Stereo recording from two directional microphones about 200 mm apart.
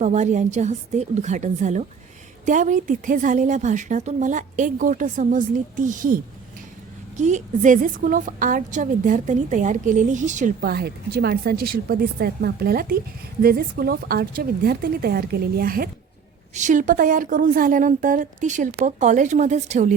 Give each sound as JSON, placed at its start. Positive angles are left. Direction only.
{"t": 0.0, "sound": "a woman's voice", "side_deg": -35}
{"t": 7.2, "sound": "a woman's voice", "side_deg": -35}